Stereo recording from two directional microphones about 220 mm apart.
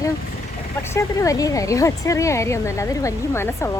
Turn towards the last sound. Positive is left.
turn(degrees=10)  # may be behind; listen again after turning